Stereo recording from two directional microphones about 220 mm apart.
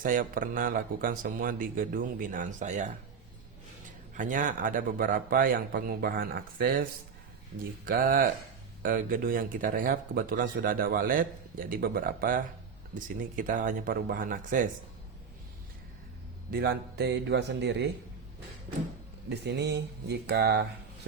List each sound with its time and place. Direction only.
0.0 s speech: 40° right (ahead or behind)
4.1 s speech: 35° right (ahead or behind)
16.5 s speech: 45° right (ahead or behind)
19.3 s speech: 50° right (ahead or behind)